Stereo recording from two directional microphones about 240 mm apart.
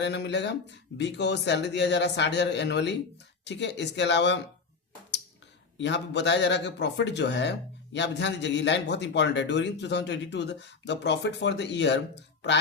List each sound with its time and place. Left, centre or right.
0.0 s a man's voice: left
5.7 s a man's voice: left